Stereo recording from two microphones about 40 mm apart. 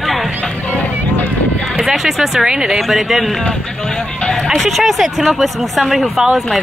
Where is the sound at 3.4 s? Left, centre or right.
Centre.